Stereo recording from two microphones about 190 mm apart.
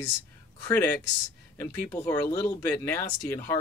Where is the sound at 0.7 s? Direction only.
10° left (ahead or behind).